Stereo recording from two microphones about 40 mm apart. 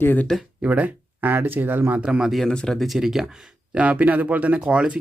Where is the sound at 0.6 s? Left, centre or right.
Right.